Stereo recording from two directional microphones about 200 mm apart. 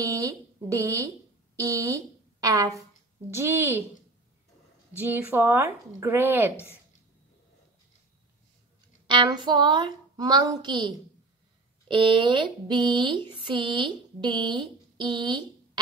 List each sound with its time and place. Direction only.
0.0 s a woman's voice: 15° right (ahead or behind)
4.9 s speech: 10° right (ahead or behind)
9.0 s a sound: 25° right (ahead or behind)